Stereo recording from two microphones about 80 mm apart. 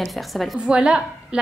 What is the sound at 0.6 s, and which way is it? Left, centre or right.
Speech, centre.